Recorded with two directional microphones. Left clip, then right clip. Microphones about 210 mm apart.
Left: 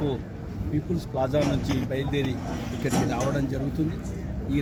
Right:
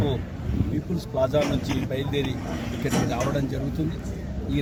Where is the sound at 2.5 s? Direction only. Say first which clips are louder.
Right 1 dB; 30° right (ahead or behind).